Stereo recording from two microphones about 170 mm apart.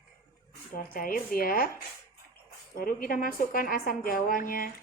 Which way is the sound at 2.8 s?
55° left (ahead or behind).